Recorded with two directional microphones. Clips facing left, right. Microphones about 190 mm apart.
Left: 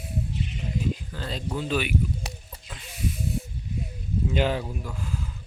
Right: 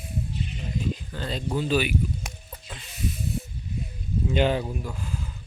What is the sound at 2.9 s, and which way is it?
Snake, 10° left (ahead or behind).